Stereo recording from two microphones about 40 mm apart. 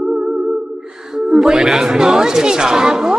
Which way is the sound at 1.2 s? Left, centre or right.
Centre.